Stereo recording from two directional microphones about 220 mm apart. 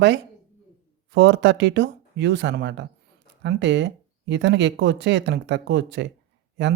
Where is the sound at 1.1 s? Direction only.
55° right (ahead or behind).